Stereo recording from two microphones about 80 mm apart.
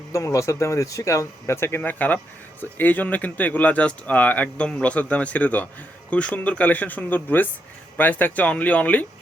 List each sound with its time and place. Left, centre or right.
0.1 s speech: left; by 9.0 s centre